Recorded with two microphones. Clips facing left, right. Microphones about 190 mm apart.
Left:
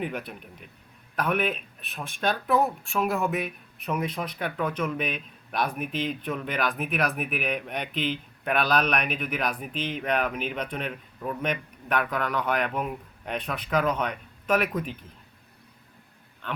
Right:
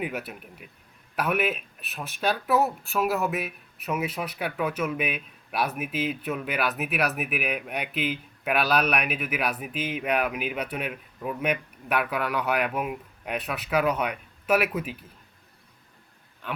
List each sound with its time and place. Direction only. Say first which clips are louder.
0.0 s a man's voice: even; 5° right (ahead or behind)